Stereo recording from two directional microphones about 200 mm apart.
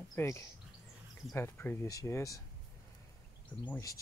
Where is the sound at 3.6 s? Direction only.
15° left (ahead or behind).